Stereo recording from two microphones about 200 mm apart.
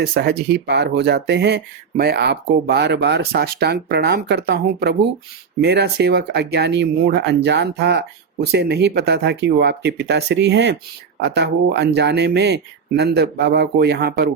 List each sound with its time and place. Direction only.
0.0 s speech: 55° right (ahead or behind)